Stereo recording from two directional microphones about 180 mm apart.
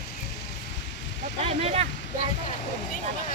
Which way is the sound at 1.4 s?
35° right (ahead or behind).